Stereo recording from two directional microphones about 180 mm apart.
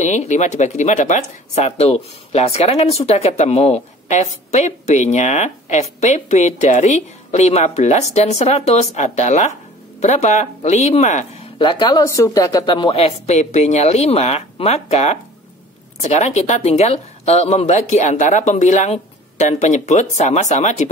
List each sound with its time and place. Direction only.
0.0 s speech: 40° left (ahead or behind)
11.5 s speech: 25° left (ahead or behind)